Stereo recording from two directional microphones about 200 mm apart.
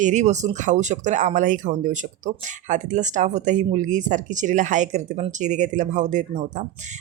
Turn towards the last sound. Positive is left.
turn(degrees=-35)  # may be behind; listen again after turning